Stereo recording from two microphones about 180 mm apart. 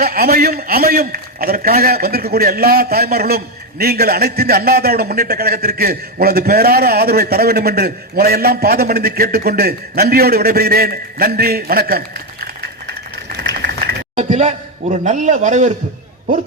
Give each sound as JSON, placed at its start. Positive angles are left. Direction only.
{"t": 0.0, "sound": "a man's voice", "side_deg": -55}
{"t": 14.2, "sound": "a man's voice", "side_deg": -40}